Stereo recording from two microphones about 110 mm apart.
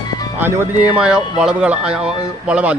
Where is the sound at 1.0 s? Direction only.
5° right (ahead or behind).